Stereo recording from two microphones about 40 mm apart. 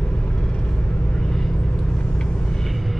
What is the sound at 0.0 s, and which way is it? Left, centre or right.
Vehicle, left.